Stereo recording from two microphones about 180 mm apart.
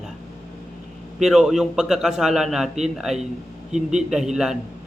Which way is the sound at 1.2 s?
Centre (ahead or behind).